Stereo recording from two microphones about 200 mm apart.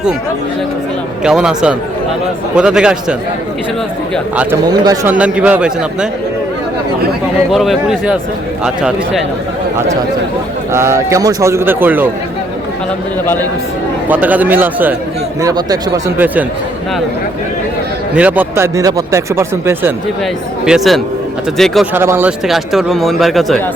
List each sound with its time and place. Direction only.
1.2 s speech: 5° right (ahead or behind)
4.7 s speech: 20° right (ahead or behind)
5.1 s speech: 5° right (ahead or behind)
7.5 s speech: centre (ahead or behind)
10.7 s speech: 15° right (ahead or behind)
14.1 s speech: 10° right (ahead or behind)
18.1 s speech: 5° right (ahead or behind)
20.7 s speech: centre (ahead or behind)
21.9 s speech: 10° right (ahead or behind)